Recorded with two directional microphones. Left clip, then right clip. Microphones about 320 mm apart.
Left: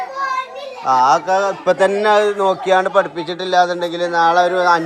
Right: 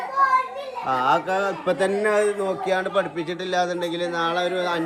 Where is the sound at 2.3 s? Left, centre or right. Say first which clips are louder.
Left 9 dB; centre.